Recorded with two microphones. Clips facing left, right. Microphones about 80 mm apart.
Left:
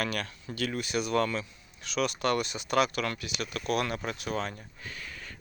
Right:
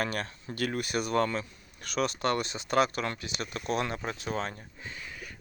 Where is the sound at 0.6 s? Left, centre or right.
Right.